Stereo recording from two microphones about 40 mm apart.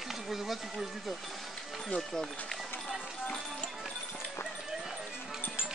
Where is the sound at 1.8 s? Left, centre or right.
Centre.